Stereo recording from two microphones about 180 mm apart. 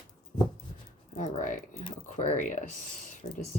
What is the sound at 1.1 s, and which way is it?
Speech, 45° left (ahead or behind).